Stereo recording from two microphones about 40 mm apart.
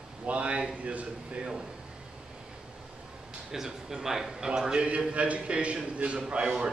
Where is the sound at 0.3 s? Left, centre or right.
Right.